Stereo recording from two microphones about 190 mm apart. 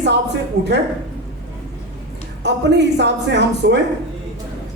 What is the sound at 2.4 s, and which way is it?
A woman's voice, 65° right (ahead or behind).